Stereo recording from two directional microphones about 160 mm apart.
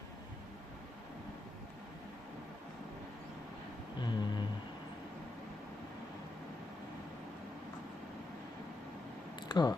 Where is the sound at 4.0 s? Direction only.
25° left (ahead or behind).